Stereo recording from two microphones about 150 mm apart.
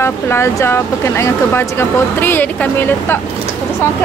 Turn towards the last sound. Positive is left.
turn(degrees=10)  # may be behind; listen again after turning